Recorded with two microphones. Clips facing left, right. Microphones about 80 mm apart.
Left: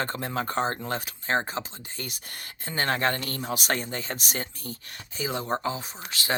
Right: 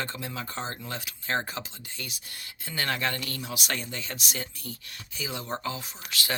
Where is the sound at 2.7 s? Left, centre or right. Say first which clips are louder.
Left 4 dB; left.